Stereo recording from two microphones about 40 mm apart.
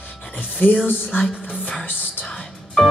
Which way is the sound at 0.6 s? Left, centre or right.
Left.